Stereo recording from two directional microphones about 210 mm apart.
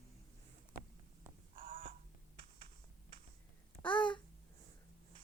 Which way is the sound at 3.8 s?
5° left (ahead or behind).